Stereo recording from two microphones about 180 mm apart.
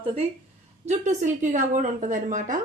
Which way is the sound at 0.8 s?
40° right (ahead or behind).